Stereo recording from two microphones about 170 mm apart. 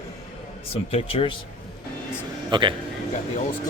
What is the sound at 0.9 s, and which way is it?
Speech, 35° left (ahead or behind).